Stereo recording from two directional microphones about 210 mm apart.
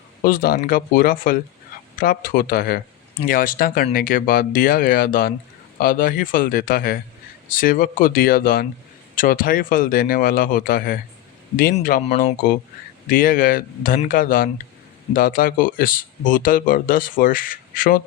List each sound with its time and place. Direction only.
0.3 s a man's voice: 45° left (ahead or behind)